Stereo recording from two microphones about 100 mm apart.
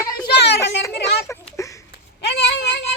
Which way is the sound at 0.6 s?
30° left (ahead or behind).